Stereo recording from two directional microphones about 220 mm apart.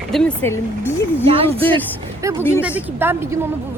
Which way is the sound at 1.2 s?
25° right (ahead or behind).